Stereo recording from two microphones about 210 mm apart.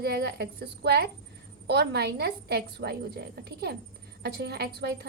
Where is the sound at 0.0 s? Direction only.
50° right (ahead or behind).